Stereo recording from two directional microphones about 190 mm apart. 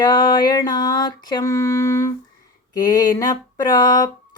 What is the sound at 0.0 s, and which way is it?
Mantra, 20° left (ahead or behind).